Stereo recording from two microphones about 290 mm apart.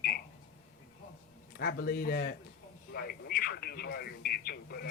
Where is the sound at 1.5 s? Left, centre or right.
Left.